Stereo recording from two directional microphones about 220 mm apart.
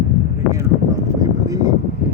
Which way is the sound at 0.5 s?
15° right (ahead or behind).